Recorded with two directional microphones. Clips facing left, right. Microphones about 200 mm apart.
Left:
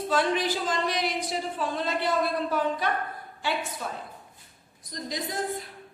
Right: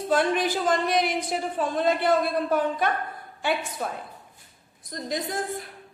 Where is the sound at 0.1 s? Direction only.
50° right (ahead or behind).